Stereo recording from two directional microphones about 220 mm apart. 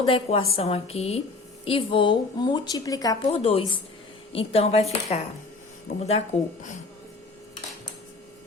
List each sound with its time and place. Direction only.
0.0 s speech: 25° left (ahead or behind)